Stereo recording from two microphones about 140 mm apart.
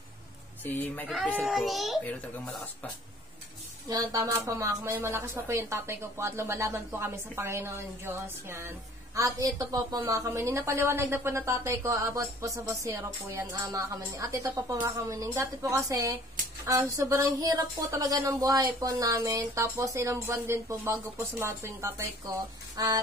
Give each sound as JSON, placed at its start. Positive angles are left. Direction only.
{"t": 0.7, "sound": "a child's voice", "side_deg": 15}
{"t": 3.9, "sound": "a woman's voice", "side_deg": -25}